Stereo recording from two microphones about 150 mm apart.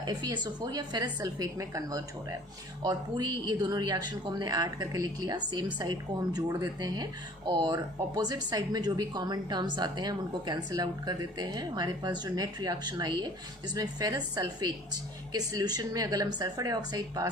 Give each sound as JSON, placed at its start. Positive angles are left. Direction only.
{"t": 0.0, "sound": "speech", "side_deg": -25}